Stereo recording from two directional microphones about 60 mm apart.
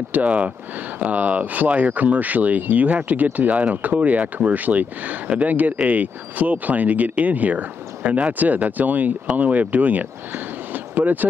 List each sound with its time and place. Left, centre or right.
0.1 s speech: right